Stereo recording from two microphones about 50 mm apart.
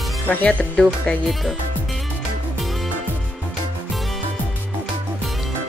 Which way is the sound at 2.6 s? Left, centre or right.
Centre.